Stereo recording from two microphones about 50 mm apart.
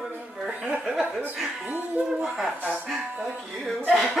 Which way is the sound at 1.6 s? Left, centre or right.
Right.